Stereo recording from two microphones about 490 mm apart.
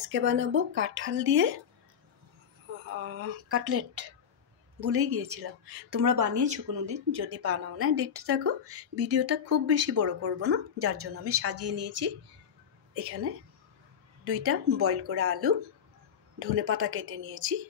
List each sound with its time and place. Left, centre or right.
0.1 s speech: right
3.0 s speech: right